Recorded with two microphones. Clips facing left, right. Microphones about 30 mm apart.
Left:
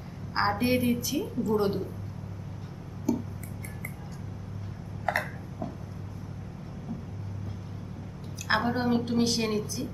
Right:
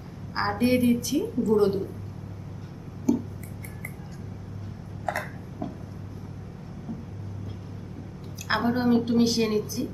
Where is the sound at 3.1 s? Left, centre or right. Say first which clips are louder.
Right 4 dB; centre.